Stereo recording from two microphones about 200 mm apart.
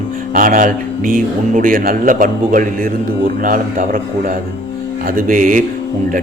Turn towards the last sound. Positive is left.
turn(degrees=-45)  # may be behind; listen again after turning